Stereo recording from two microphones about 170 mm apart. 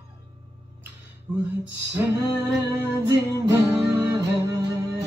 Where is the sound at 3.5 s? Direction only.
15° right (ahead or behind).